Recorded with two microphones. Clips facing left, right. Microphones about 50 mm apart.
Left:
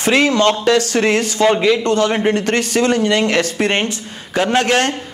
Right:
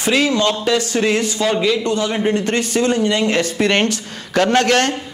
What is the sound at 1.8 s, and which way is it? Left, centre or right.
Speech, left.